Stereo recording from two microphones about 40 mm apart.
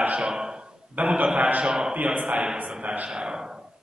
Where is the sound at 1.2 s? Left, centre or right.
Right.